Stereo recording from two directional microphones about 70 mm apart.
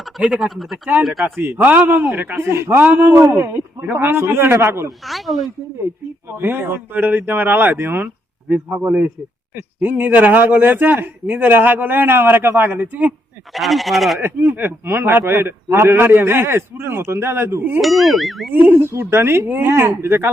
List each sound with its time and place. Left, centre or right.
0.2 s speech: centre
1.4 s a man's voice: right
3.2 s a man's voice: right
5.0 s speech: centre
6.4 s a man's voice: right
13.5 s speech: centre
14.2 s a man's voice: right
17.7 s speech: centre
18.5 s a man's voice: right
18.9 s a man's voice: right